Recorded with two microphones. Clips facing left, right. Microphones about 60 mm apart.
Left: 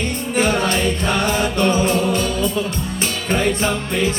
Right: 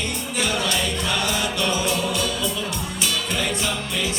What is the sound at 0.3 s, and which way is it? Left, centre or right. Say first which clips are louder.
Music: left 6 dB; left.